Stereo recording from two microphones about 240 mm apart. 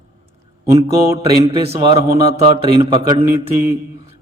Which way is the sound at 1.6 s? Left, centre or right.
Right.